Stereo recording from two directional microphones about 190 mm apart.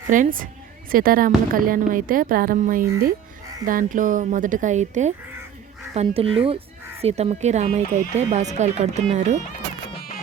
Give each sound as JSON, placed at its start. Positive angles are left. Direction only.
{"t": 0.1, "sound": "speech", "side_deg": -45}
{"t": 9.9, "sound": "music", "side_deg": 55}